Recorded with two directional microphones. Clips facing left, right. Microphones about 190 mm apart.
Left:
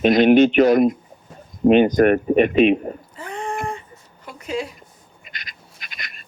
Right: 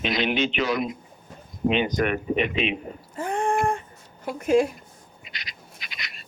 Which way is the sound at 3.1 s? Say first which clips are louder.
Right 8 dB; 50° right (ahead or behind).